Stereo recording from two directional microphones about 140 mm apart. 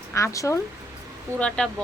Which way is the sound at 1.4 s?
5° left (ahead or behind).